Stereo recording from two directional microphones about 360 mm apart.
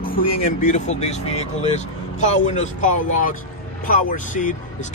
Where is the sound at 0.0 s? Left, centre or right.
Left.